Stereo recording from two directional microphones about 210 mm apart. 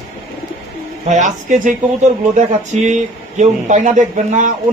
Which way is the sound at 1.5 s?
40° right (ahead or behind).